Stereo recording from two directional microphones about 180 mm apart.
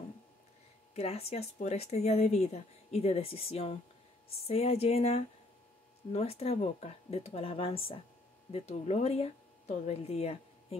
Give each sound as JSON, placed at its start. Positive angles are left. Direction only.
{"t": 0.9, "sound": "speech", "side_deg": 35}